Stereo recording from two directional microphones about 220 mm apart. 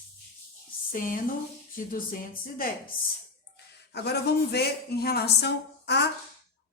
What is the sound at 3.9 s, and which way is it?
A woman's voice, 45° left (ahead or behind).